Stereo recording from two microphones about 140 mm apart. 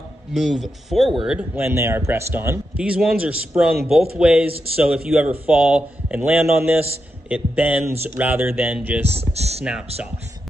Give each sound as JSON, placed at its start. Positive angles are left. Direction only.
{"t": 0.3, "sound": "speech", "side_deg": 0}
{"t": 1.6, "sound": "a man's voice", "side_deg": -20}
{"t": 2.8, "sound": "a man's voice", "side_deg": -5}
{"t": 9.0, "sound": "speech", "side_deg": -50}